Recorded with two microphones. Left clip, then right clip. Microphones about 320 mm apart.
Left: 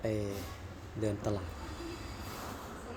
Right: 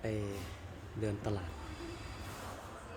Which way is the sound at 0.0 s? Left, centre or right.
Centre.